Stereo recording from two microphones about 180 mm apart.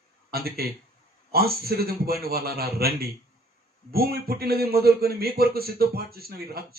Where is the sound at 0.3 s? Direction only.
60° right (ahead or behind).